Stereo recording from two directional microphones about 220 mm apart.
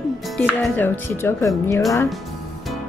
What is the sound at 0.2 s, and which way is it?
Speech, centre (ahead or behind).